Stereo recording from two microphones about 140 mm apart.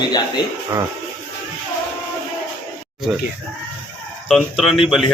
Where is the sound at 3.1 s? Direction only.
5° right (ahead or behind).